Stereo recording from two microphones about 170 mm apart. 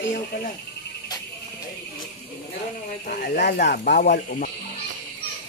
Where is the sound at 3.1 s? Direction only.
75° left (ahead or behind).